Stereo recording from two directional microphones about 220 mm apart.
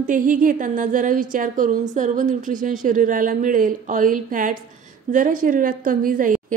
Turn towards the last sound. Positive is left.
turn(degrees=-40)  # may be behind; listen again after turning